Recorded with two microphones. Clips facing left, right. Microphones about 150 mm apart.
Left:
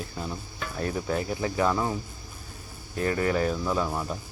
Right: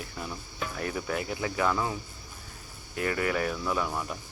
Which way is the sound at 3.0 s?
30° left (ahead or behind).